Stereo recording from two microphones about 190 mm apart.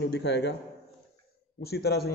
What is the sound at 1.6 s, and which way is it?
Speech, 55° left (ahead or behind).